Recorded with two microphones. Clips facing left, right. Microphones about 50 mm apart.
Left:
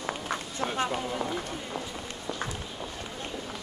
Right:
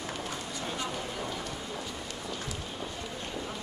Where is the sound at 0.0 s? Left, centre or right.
Left.